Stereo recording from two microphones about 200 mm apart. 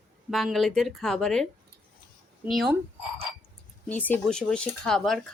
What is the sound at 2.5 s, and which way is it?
Speech, centre (ahead or behind).